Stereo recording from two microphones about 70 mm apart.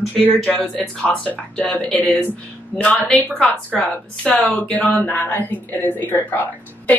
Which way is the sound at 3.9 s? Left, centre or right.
Left.